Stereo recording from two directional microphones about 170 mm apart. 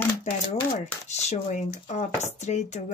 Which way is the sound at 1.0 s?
40° left (ahead or behind).